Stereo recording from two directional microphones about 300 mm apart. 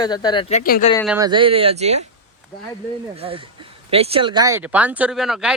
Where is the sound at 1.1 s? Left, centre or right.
Centre.